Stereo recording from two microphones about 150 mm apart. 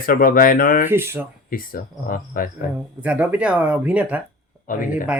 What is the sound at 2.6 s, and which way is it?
Speech, 75° left (ahead or behind).